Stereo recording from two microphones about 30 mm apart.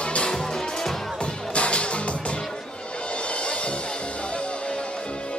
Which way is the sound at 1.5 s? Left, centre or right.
Left.